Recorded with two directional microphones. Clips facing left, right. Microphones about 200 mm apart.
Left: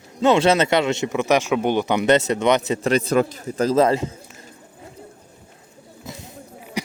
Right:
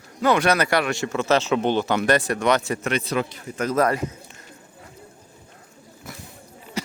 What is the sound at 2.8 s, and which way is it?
A man's voice, 40° left (ahead or behind).